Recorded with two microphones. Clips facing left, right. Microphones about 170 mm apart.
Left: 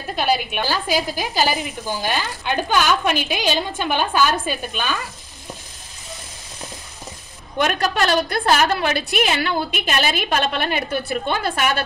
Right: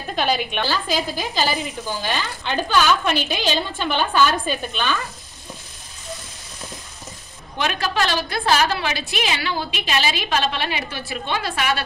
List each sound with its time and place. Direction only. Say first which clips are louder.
0.1 s a woman's voice: left 1 dB; 5° left (ahead or behind)
7.6 s a woman's voice: left 3 dB; 50° left (ahead or behind)